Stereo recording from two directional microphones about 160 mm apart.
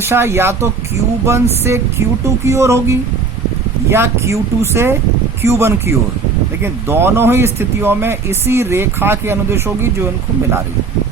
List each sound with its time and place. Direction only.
0.0 s speech: 15° right (ahead or behind)